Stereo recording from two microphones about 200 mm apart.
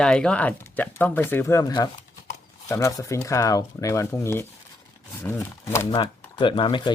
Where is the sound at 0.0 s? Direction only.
5° left (ahead or behind).